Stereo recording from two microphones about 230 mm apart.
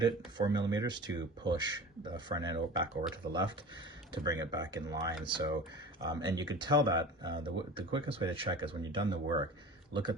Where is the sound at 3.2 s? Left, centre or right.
Right.